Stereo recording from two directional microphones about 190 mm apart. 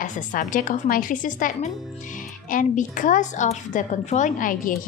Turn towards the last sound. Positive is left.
turn(degrees=45)  # may be behind; listen again after turning